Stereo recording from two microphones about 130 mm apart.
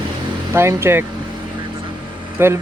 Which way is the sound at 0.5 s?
20° right (ahead or behind).